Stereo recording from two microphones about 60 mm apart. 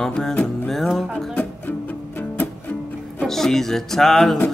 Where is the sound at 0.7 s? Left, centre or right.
Centre.